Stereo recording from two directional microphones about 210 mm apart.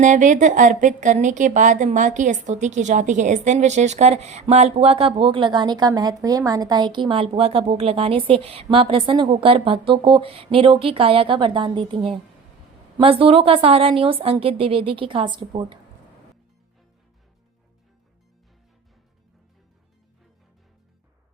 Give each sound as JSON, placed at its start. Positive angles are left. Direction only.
{"t": 0.0, "sound": "a woman's voice", "side_deg": -35}